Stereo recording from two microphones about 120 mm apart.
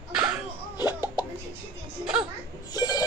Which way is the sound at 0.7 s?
35° left (ahead or behind).